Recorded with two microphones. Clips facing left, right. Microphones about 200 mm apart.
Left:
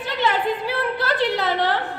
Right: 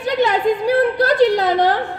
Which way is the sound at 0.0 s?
45° right (ahead or behind).